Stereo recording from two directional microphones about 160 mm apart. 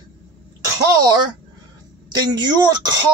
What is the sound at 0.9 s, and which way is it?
Speech, 25° right (ahead or behind).